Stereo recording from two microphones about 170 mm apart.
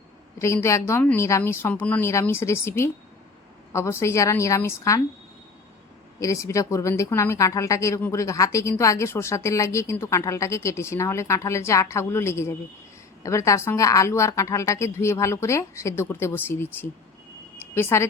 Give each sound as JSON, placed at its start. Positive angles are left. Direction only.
{"t": 0.3, "sound": "a woman's voice", "side_deg": 15}
{"t": 6.1, "sound": "a woman's voice", "side_deg": 20}
{"t": 17.7, "sound": "a woman's voice", "side_deg": 15}